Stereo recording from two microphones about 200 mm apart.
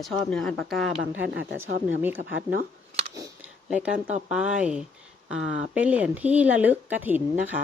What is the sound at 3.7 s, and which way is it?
Speech, 5° right (ahead or behind).